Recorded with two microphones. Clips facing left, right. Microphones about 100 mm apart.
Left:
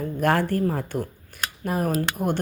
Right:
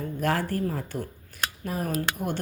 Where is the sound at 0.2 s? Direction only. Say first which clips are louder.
Left 5 dB; 60° left (ahead or behind).